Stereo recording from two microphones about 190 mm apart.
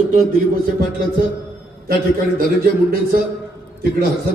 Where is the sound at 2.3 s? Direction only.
50° right (ahead or behind).